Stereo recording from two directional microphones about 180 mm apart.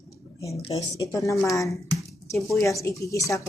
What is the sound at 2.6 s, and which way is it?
Speech, 15° left (ahead or behind).